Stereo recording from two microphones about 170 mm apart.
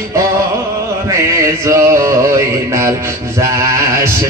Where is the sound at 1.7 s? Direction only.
20° right (ahead or behind).